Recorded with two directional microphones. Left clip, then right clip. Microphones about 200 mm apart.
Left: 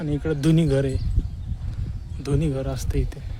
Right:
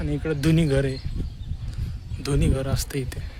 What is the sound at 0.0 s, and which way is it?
Speech, 10° left (ahead or behind).